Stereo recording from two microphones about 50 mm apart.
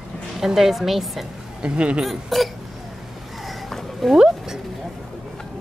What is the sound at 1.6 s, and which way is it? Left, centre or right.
Speech, centre.